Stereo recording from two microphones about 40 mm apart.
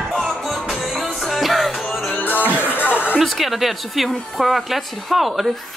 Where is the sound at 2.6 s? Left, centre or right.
Left.